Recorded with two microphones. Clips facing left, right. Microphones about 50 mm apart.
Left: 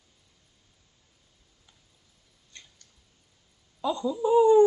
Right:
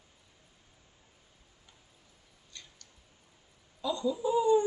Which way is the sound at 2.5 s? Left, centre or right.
Left.